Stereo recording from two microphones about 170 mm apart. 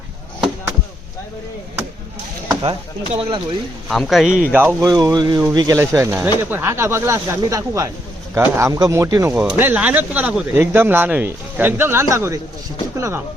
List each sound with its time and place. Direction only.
3.2 s speech: 30° right (ahead or behind)
3.8 s speech: centre (ahead or behind)
4.5 s speech: 15° right (ahead or behind)